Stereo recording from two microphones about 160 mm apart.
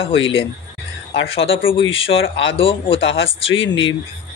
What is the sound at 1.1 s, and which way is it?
Speech, 35° left (ahead or behind).